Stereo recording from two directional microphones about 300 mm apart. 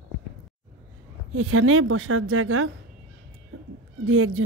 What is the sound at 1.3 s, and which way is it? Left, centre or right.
Speech, right.